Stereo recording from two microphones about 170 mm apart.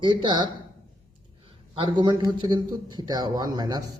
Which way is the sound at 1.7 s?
30° right (ahead or behind).